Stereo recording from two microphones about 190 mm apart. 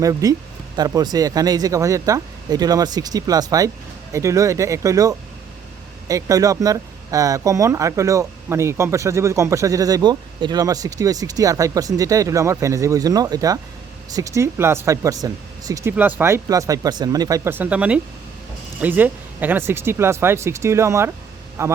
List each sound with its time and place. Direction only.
0.0 s speech: 20° right (ahead or behind)